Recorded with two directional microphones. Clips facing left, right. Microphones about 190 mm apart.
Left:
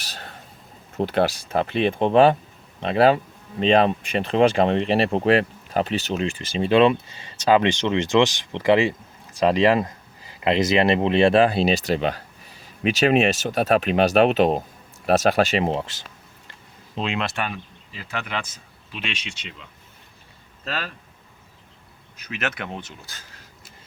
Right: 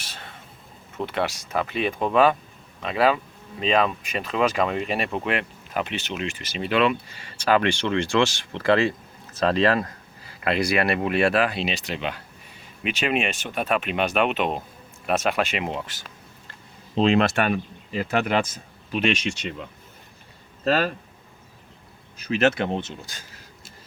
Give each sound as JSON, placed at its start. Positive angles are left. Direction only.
{"t": 0.0, "sound": "a sound", "side_deg": 35}
{"t": 0.9, "sound": "speech", "side_deg": 35}
{"t": 16.9, "sound": "speech", "side_deg": -35}
{"t": 20.7, "sound": "speech", "side_deg": -45}
{"t": 22.2, "sound": "speech", "side_deg": -30}